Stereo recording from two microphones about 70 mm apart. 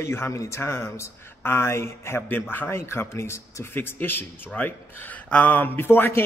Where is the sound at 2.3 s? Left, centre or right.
Left.